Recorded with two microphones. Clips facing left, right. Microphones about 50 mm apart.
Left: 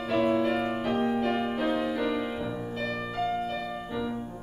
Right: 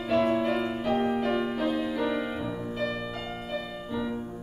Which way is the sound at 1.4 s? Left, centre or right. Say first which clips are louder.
Even; centre.